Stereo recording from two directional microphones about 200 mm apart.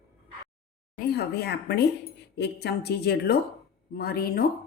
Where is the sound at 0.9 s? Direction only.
50° left (ahead or behind).